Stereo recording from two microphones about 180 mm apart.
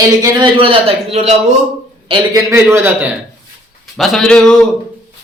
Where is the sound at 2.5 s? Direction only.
15° right (ahead or behind).